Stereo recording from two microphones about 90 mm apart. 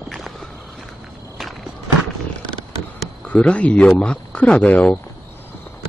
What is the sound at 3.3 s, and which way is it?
Speech, 15° left (ahead or behind).